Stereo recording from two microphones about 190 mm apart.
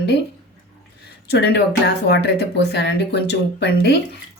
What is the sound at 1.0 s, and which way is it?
Speech, 60° left (ahead or behind).